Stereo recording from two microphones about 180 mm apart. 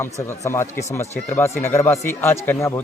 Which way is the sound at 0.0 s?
15° left (ahead or behind).